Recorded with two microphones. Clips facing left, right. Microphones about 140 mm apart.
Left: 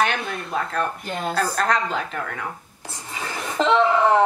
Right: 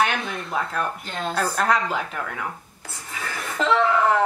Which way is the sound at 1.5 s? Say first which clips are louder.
Even; 5° right (ahead or behind).